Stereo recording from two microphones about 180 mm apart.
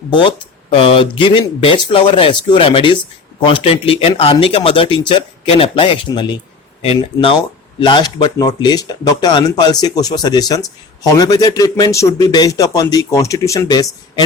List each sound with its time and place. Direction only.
0.1 s speech: 25° left (ahead or behind)